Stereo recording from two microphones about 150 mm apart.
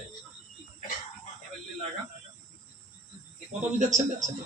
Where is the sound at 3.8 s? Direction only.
55° right (ahead or behind).